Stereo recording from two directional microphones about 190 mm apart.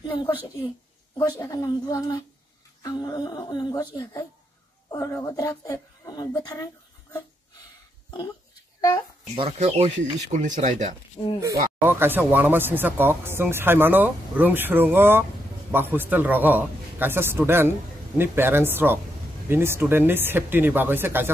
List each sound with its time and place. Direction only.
0.0 s a woman's voice: 25° left (ahead or behind)
1.4 s a woman's voice: 20° left (ahead or behind)
9.3 s speech: 30° right (ahead or behind)
11.2 s speech: 25° left (ahead or behind)
11.8 s speech: 10° right (ahead or behind)